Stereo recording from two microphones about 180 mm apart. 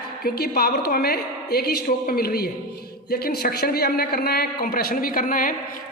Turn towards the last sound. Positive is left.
turn(degrees=50)  # may be behind; listen again after turning